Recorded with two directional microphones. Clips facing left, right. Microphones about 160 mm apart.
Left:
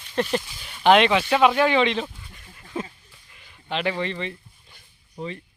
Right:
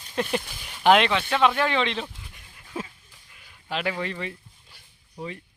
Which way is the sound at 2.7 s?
5° right (ahead or behind).